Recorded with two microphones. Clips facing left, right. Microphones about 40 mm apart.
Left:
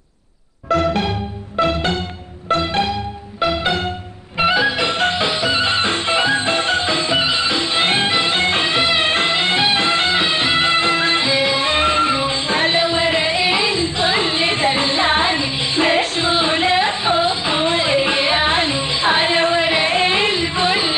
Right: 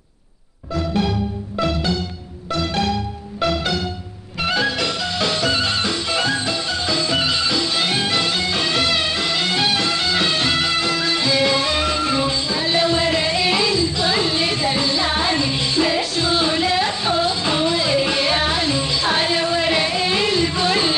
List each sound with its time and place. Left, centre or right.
0.7 s music: left
1.6 s music: left
2.9 s music: centre
6.5 s music: left
7.1 s music: left
8.7 s music: left
11.3 s music: centre
11.7 s music: left
12.7 s music: left